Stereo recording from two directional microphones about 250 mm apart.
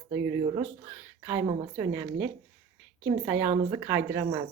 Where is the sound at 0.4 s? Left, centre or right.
Right.